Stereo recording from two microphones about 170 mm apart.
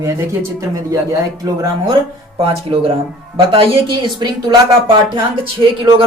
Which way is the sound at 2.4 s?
35° right (ahead or behind).